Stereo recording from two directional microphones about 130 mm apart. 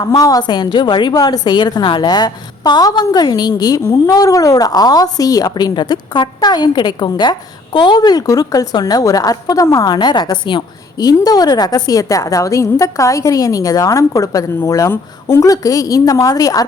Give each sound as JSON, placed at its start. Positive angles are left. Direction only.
{"t": 0.0, "sound": "a woman's voice", "side_deg": 30}